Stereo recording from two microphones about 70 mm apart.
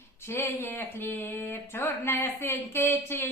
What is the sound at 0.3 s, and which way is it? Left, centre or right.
Speech, left.